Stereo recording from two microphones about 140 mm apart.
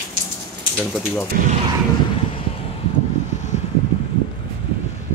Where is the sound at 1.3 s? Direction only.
90° right.